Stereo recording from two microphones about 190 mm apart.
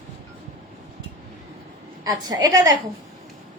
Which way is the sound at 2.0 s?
20° right (ahead or behind).